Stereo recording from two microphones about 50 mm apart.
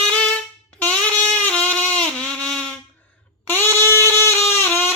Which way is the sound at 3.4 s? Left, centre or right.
Left.